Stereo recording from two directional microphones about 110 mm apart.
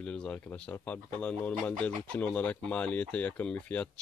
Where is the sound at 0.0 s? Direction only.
10° left (ahead or behind).